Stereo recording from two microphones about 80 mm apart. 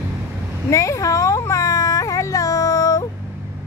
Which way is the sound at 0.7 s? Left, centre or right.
Left.